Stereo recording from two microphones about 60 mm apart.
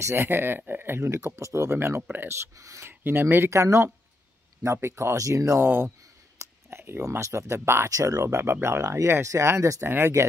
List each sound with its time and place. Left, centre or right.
0.1 s speech: right
2.6 s speech: right
2.9 s speech: right
3.4 s speech: right
5.1 s speech: right
5.6 s speech: right
6.3 s a sound: right
7.0 s speech: right
7.9 s speech: right
8.4 s speech: right
9.0 s speech: right
9.8 s speech: right